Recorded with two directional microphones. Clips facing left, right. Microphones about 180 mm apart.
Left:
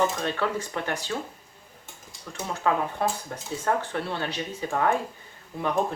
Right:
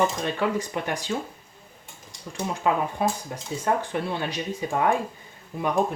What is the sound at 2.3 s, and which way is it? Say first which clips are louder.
Speech: right 1 dB; 15° right (ahead or behind).